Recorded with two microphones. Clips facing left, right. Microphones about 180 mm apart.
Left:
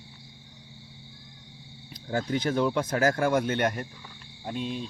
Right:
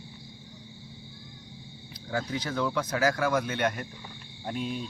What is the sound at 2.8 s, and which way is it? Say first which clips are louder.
Speech: left 2 dB; 50° left (ahead or behind).